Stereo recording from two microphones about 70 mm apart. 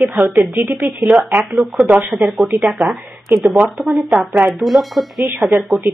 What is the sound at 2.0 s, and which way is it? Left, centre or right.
Speech, centre.